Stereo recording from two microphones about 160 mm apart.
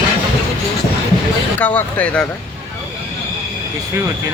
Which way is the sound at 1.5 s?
10° left (ahead or behind).